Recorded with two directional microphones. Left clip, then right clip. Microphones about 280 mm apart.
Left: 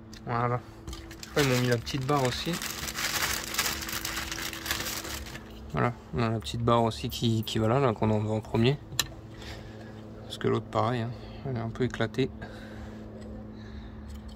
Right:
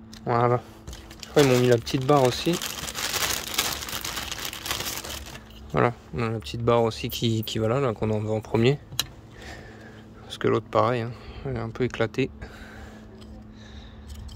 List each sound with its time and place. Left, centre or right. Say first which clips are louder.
0.3 s speech: right 7 dB; right
1.4 s crumpling: right 7 dB; right
5.7 s speech: right 7 dB; centre
6.1 s speech: right 1 dB; centre
10.3 s speech: right 6 dB; centre